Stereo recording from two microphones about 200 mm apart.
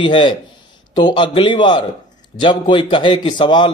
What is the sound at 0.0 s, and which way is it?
A man's voice, 25° left (ahead or behind).